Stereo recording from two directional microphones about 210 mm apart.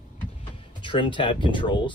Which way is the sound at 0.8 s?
25° left (ahead or behind).